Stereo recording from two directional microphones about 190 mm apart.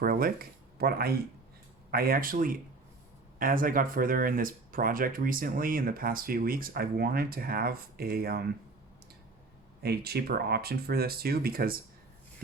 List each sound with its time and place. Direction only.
0.0 s speech: 50° right (ahead or behind)
9.8 s speech: 55° right (ahead or behind)